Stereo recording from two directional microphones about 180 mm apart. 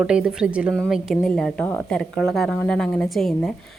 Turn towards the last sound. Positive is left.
turn(degrees=0)  # may be behind; listen again after turning